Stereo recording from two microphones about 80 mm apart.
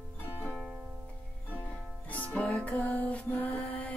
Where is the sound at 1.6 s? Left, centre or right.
Centre.